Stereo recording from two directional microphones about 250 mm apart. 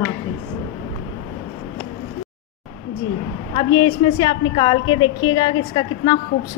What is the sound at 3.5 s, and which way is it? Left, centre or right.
A woman's voice, centre.